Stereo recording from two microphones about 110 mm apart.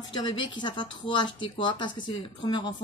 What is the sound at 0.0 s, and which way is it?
Speech, 40° left (ahead or behind).